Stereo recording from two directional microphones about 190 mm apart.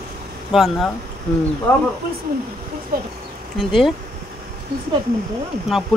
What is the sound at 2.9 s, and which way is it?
Speech, 50° right (ahead or behind).